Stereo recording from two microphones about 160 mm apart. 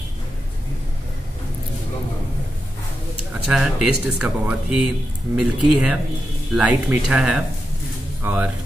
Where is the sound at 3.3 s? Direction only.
5° right (ahead or behind).